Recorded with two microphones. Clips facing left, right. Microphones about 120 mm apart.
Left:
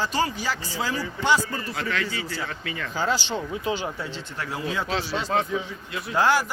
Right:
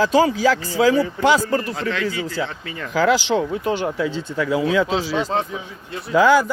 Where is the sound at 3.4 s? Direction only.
55° right (ahead or behind).